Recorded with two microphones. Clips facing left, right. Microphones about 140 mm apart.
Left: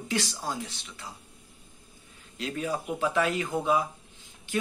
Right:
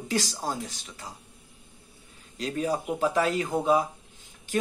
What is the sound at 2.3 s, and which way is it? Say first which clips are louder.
Speech: right 3 dB; 40° right (ahead or behind).